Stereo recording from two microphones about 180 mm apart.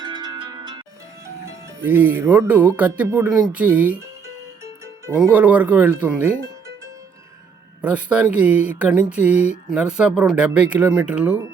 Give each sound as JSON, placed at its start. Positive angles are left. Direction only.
{"t": 0.0, "sound": "music", "side_deg": -25}
{"t": 1.8, "sound": "speech", "side_deg": -10}
{"t": 7.8, "sound": "speech", "side_deg": -10}